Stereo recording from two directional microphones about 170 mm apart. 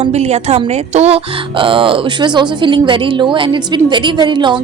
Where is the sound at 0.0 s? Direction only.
40° right (ahead or behind).